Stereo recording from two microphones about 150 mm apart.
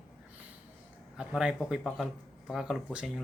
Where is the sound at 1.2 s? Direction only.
5° right (ahead or behind).